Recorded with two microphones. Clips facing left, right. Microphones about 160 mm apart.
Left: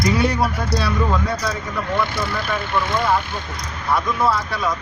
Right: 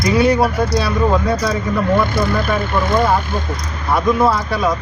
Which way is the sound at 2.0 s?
45° right (ahead or behind).